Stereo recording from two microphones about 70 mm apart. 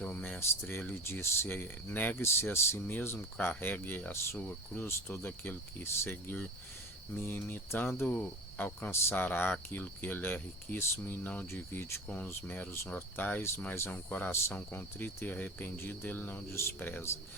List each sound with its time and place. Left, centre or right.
0.0 s a sound: left
0.3 s speech: left
3.3 s speech: left
4.1 s speech: left
12.0 s speech: centre
12.3 s speech: left